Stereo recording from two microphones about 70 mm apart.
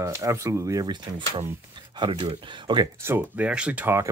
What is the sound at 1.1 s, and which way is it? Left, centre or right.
Speech, right.